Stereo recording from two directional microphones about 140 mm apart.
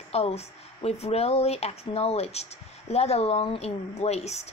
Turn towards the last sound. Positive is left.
turn(degrees=50)  # may be behind; listen again after turning